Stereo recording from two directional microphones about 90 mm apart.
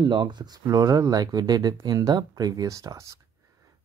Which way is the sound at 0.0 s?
60° right (ahead or behind).